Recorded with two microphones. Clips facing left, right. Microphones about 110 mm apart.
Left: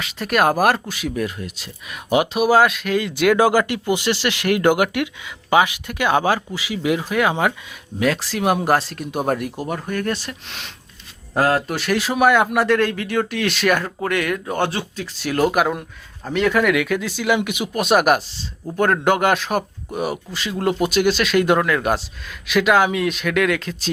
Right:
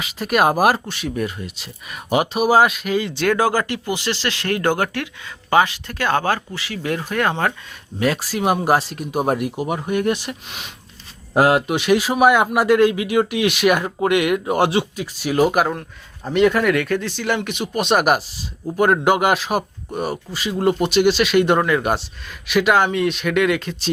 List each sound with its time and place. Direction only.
0.0 s speech: 5° right (ahead or behind)
3.2 s speech: 15° left (ahead or behind)
7.9 s speech: 5° right (ahead or behind)
11.3 s speech: 20° right (ahead or behind)
11.8 s speech: 5° right (ahead or behind)
14.5 s speech: 25° right (ahead or behind)
14.9 s speech: 10° right (ahead or behind)